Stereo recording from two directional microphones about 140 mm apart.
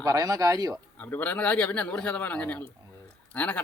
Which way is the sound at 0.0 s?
25° right (ahead or behind).